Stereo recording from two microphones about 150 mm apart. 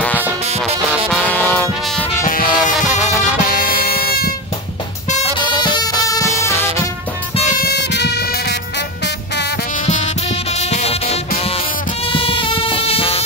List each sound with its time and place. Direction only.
1.1 s music: 10° left (ahead or behind)
2.2 s music: 65° left (ahead or behind)
3.4 s music: 85° left
5.8 s music: 25° left (ahead or behind)
7.6 s music: 90° left
9.8 s music: 50° left (ahead or behind)